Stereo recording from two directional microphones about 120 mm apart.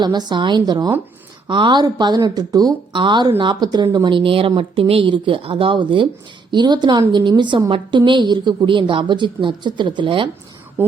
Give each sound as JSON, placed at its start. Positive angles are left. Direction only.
{"t": 0.0, "sound": "speech", "side_deg": -35}